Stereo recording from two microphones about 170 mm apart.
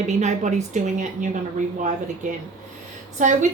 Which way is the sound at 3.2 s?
45° right (ahead or behind).